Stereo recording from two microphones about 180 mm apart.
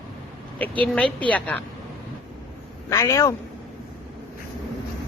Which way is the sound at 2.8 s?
15° left (ahead or behind).